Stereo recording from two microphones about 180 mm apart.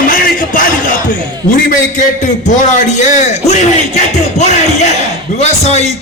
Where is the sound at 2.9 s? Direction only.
40° left (ahead or behind).